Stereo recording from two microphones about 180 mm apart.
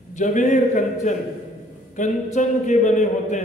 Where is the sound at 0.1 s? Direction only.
45° left (ahead or behind).